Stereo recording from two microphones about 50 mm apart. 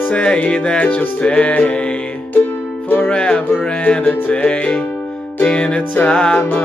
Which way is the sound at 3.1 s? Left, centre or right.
Left.